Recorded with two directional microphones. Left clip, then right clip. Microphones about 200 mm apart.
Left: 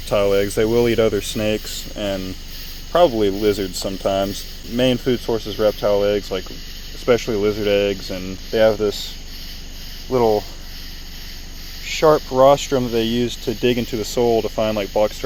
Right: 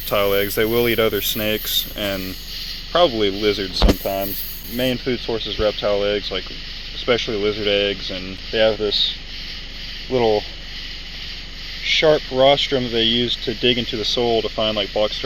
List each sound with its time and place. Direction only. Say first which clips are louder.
0.1 s speech: left 1 dB; 20° left (ahead or behind)
4.0 s speech: left 4 dB; 30° left (ahead or behind)
4.8 s speech: left 3 dB; 20° left (ahead or behind)
10.1 s speech: left 1 dB; 10° left (ahead or behind)
12.0 s speech: left 3 dB; 10° left (ahead or behind)